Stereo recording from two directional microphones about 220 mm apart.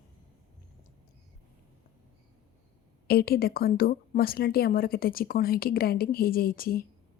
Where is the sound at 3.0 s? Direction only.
45° left (ahead or behind).